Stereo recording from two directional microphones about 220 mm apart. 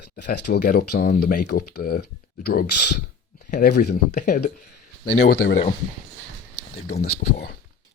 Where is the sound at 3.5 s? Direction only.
40° left (ahead or behind).